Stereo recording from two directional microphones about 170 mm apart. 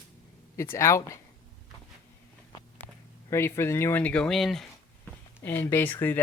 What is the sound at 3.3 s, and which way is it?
Speech, 15° left (ahead or behind).